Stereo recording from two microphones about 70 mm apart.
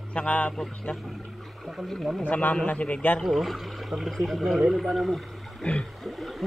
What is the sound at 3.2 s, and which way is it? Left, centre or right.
Speech, centre.